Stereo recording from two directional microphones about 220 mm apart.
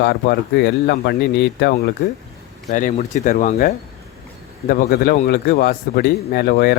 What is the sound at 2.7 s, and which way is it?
Speech, 35° left (ahead or behind).